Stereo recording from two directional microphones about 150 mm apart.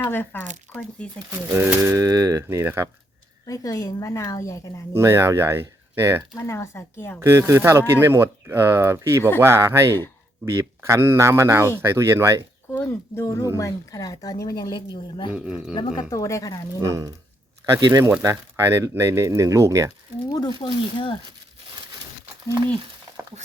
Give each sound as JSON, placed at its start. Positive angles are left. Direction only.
{"t": 0.0, "sound": "speech", "side_deg": 15}
{"t": 1.3, "sound": "speech", "side_deg": -20}
{"t": 3.4, "sound": "speech", "side_deg": 20}
{"t": 4.9, "sound": "speech", "side_deg": -20}
{"t": 6.3, "sound": "speech", "side_deg": 20}
{"t": 7.2, "sound": "speech", "side_deg": -15}
{"t": 12.7, "sound": "speech", "side_deg": 15}
{"t": 15.3, "sound": "speech", "side_deg": -5}
{"t": 15.7, "sound": "speech", "side_deg": 30}
{"t": 16.8, "sound": "speech", "side_deg": -25}
{"t": 20.6, "sound": "speech", "side_deg": 35}